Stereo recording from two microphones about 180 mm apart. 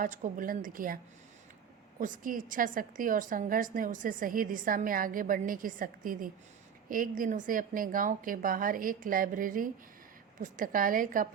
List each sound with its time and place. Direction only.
0.0 s a woman's voice: 45° right (ahead or behind)
2.0 s a woman's voice: 50° right (ahead or behind)